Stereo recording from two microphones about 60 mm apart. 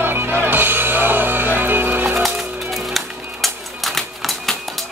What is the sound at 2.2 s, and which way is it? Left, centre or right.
Music, centre.